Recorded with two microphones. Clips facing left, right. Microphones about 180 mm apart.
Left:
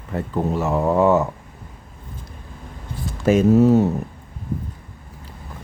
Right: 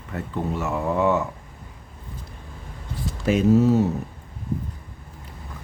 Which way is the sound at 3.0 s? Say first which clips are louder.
Left 4 dB; 45° left (ahead or behind).